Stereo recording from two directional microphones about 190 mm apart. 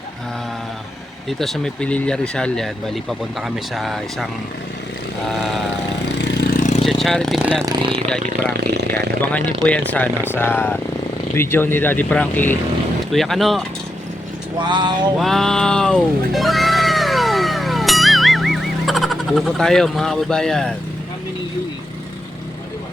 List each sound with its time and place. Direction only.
1.3 s speech: centre (ahead or behind)
6.1 s vehicle: 65° left (ahead or behind); by 6.8 s 40° left (ahead or behind)
6.8 s a sound: centre (ahead or behind)
7.6 s speech: 20° right (ahead or behind)
8.2 s speech: 50° right (ahead or behind)
9.3 s speech: 5° left (ahead or behind)
14.6 s speech: 25° right (ahead or behind)
15.2 s music: centre (ahead or behind)